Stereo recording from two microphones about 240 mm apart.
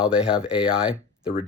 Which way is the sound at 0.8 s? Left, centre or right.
Centre.